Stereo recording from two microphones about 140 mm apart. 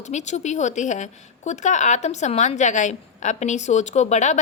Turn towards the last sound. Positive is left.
turn(degrees=60)  # may be behind; listen again after turning